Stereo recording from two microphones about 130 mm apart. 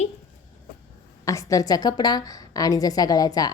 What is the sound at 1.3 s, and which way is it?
A woman's voice, 25° left (ahead or behind).